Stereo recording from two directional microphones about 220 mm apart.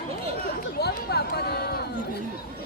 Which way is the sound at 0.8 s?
45° left (ahead or behind).